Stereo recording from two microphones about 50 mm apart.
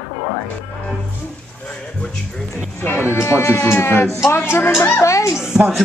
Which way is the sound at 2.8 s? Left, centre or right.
Left.